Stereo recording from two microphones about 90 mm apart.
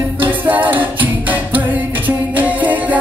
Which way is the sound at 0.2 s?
20° right (ahead or behind).